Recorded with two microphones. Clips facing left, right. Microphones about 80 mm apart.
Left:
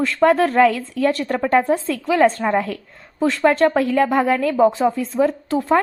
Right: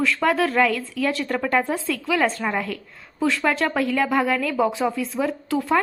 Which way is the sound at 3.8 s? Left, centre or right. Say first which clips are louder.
Left 4 dB; left.